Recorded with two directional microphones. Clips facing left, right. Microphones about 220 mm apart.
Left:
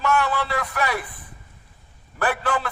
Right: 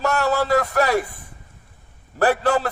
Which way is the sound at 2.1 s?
40° right (ahead or behind).